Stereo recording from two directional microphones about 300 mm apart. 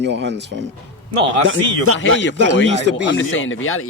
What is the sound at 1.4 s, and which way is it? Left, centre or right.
Speech, right.